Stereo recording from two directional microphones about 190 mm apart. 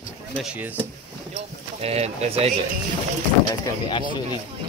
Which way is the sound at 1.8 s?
30° right (ahead or behind).